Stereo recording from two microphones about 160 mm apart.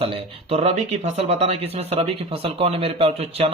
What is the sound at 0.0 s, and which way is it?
Speech, 35° right (ahead or behind).